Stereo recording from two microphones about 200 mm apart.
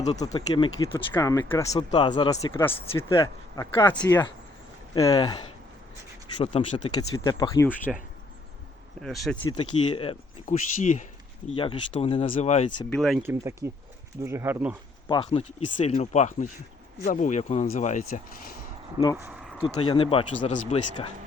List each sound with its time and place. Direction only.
0.0 s speech: 20° left (ahead or behind)
3.1 s speech: 20° left (ahead or behind)
6.4 s speech: 30° left (ahead or behind)
7.1 s speech: 20° left (ahead or behind)
9.0 s speech: centre (ahead or behind)
9.4 s speech: 25° left (ahead or behind)
11.4 s speech: 25° left (ahead or behind)
12.9 s speech: centre (ahead or behind)
13.2 s speech: 15° right (ahead or behind)
15.0 s speech: 25° left (ahead or behind); by 18.5 s 40° left (ahead or behind)
19.1 s a sound: 10° right (ahead or behind)
19.6 s speech: 25° left (ahead or behind)